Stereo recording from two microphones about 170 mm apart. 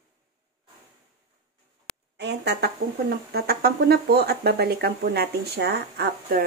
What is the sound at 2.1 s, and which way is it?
Speech, 80° right.